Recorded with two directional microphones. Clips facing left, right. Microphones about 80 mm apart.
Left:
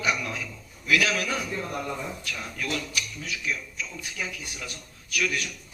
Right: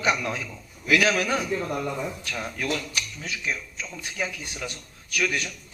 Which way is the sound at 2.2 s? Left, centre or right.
Right.